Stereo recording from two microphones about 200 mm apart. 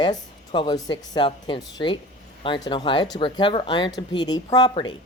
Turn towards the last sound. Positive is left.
turn(degrees=25)  # may be behind; listen again after turning